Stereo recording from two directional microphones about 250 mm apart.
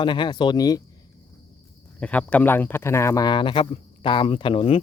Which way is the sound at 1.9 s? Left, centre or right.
Centre.